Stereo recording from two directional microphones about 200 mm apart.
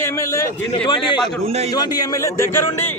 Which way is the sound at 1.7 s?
20° left (ahead or behind).